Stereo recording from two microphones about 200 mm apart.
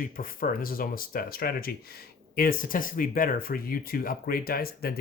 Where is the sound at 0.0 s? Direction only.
45° left (ahead or behind).